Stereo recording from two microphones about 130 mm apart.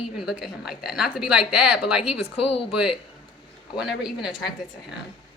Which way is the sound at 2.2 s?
50° left (ahead or behind).